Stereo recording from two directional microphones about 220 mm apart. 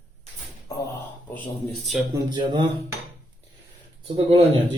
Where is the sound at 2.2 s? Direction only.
20° right (ahead or behind).